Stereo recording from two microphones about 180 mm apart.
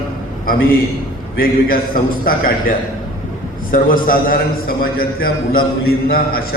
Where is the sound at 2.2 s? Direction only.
50° left (ahead or behind).